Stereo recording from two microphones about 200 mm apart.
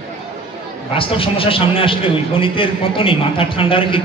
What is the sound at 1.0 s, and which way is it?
A man's voice, 25° left (ahead or behind).